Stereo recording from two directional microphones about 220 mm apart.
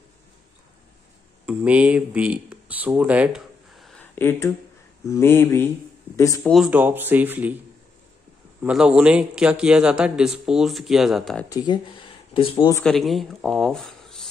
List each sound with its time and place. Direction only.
1.4 s speech: 5° right (ahead or behind); by 6.5 s 15° left (ahead or behind)
6.5 s speech: 5° right (ahead or behind)
8.6 s a man's voice: 5° right (ahead or behind)
11.4 s speech: 20° left (ahead or behind)
12.8 s speech: centre (ahead or behind)